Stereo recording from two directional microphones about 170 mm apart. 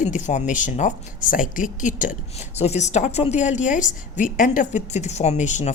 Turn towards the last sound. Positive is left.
turn(degrees=45)  # may be behind; listen again after turning